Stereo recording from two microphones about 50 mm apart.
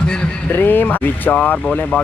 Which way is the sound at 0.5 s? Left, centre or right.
Left.